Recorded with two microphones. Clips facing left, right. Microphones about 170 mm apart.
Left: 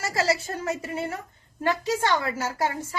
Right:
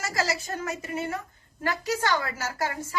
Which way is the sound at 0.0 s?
30° left (ahead or behind).